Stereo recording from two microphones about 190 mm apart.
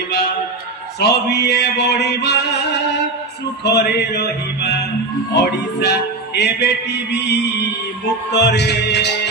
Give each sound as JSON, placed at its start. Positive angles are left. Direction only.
{"t": 0.9, "sound": "music", "side_deg": 60}
{"t": 3.6, "sound": "music", "side_deg": 60}